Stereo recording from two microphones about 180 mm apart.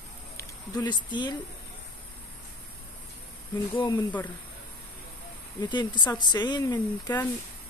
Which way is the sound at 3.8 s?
20° left (ahead or behind).